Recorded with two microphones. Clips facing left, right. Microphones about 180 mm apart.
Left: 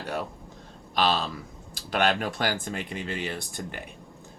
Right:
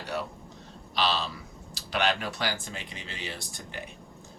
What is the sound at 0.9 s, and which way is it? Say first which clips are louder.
Speech: left 4 dB; 50° left (ahead or behind).